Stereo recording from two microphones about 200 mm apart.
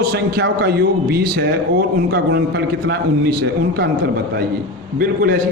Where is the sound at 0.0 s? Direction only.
50° right (ahead or behind).